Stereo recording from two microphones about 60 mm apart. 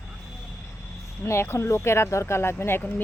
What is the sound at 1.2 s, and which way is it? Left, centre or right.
Speech, left.